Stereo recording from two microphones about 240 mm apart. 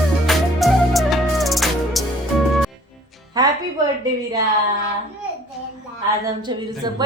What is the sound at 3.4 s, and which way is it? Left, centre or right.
Music, centre.